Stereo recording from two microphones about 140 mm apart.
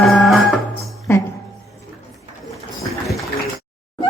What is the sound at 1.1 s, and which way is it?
Music, 15° left (ahead or behind).